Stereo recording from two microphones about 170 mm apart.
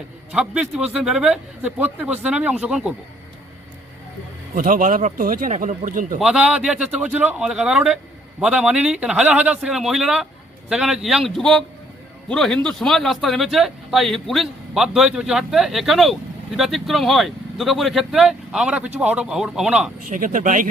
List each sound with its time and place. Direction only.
0.3 s speech: 5° right (ahead or behind)
4.5 s speech: 55° right (ahead or behind)
6.1 s speech: 5° right (ahead or behind)
20.1 s speech: 50° right (ahead or behind)